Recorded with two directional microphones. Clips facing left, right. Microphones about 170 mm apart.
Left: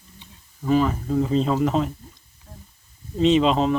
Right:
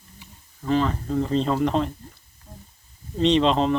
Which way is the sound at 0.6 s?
5° left (ahead or behind).